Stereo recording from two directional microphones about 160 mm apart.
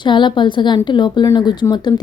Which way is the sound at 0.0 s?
30° left (ahead or behind).